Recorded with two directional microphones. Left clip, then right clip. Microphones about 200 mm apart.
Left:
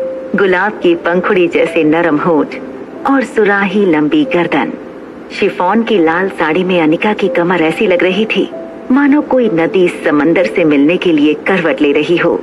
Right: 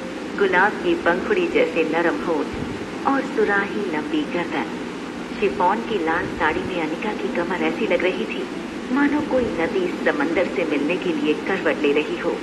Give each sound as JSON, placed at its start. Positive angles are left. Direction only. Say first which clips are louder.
{"t": 0.4, "sound": "speech", "louder": "left 6 dB", "side_deg": 40}